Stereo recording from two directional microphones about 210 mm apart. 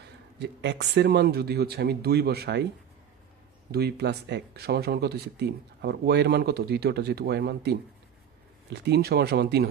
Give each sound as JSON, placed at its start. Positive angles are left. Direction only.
{"t": 0.4, "sound": "speech", "side_deg": -55}
{"t": 3.7, "sound": "speech", "side_deg": -50}